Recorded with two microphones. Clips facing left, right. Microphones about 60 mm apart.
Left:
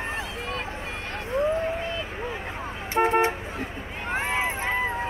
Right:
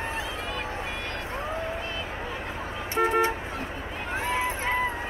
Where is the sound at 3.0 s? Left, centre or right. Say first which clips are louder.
Left 2 dB; left.